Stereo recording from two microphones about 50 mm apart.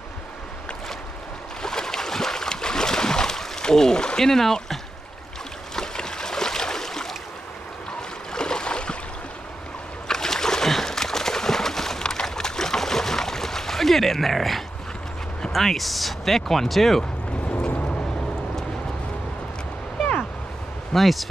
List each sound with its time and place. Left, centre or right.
1.6 s boat: centre
5.8 s boat: centre
8.3 s a sound: centre
10.0 s a sound: centre
15.5 s speech: centre
17.7 s vehicle: left
20.9 s speech: centre